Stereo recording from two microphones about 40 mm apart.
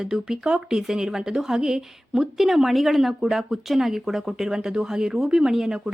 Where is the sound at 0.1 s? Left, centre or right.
Centre.